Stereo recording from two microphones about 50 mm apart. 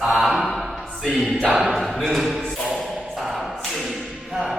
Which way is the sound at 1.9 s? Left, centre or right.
Centre.